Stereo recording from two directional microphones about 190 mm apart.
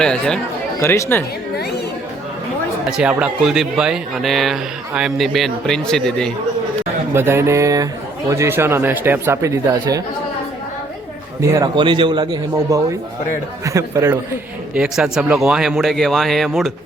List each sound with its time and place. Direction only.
0.0 s speech: 5° left (ahead or behind)
0.8 s speech: 15° left (ahead or behind)
3.0 s speech: 5° right (ahead or behind)
7.1 s speech: 10° right (ahead or behind)
11.3 s a man's voice: 15° right (ahead or behind)
14.8 s speech: 5° right (ahead or behind)